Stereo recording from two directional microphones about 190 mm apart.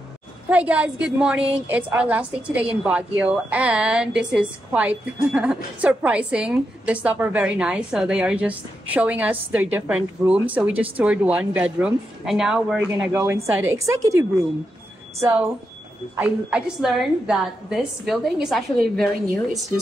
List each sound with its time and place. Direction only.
0.5 s a woman's voice: 5° right (ahead or behind)